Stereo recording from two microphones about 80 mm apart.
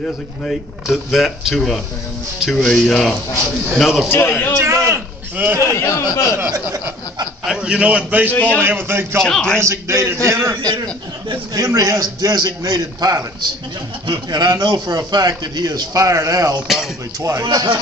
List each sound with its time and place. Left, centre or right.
0.5 s speech: centre
4.1 s a man's voice: left
4.6 s a sound: right
5.7 s speech: left
6.5 s speech: right
7.4 s a man's voice: centre
8.3 s a man's voice: centre
8.5 s a man's voice: right
9.2 s a man's voice: centre
9.6 s a man's voice: right
11.5 s a man's voice: right
14.0 s a man's voice: right
16.6 s speech: centre
17.2 s a man's voice: right